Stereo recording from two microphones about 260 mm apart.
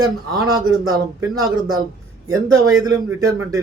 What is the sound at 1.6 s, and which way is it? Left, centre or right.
Speech, centre.